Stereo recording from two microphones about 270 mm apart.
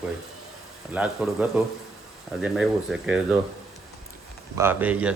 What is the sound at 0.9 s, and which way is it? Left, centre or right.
A man's voice, centre.